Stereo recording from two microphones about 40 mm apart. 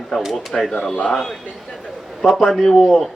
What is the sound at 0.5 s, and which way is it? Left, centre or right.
Speech, centre.